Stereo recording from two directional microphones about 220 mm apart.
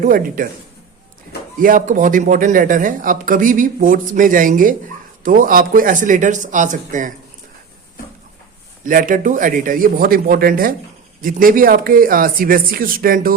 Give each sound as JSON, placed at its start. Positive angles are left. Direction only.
{"t": 0.0, "sound": "speech", "side_deg": -40}
{"t": 1.5, "sound": "speech", "side_deg": -40}
{"t": 8.8, "sound": "speech", "side_deg": -40}